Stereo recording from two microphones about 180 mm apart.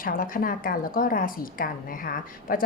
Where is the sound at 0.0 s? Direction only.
50° left (ahead or behind).